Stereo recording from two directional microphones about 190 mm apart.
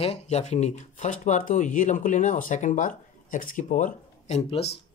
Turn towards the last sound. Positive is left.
turn(degrees=35)  # may be behind; listen again after turning